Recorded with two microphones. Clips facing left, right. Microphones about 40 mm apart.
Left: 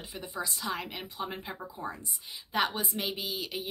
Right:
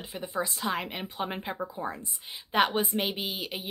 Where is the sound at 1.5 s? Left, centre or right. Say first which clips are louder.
Right 5 dB; right.